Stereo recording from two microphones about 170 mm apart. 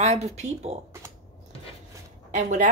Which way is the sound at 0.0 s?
40° right (ahead or behind).